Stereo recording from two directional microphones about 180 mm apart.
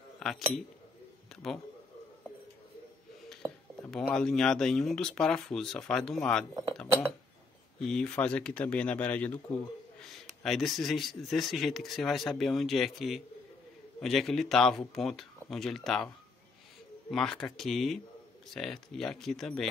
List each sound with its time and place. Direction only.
0.2 s a man's voice: centre (ahead or behind)
3.4 s dishes: 15° right (ahead or behind)
4.0 s speech: centre (ahead or behind)
7.8 s speech: 5° left (ahead or behind)
17.1 s speech: 5° left (ahead or behind)